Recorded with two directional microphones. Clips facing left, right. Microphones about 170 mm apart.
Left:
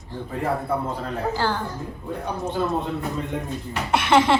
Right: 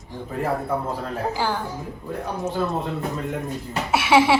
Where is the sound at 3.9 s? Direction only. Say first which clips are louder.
Right 1 dB; 5° right (ahead or behind).